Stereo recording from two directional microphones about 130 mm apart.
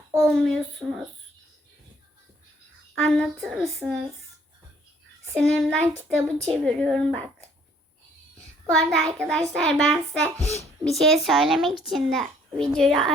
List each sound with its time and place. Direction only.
0.3 s a child's voice: 5° left (ahead or behind)
3.0 s a child's voice: 5° left (ahead or behind)
5.3 s a woman's voice: 5° left (ahead or behind)
8.6 s a child's voice: 5° left (ahead or behind)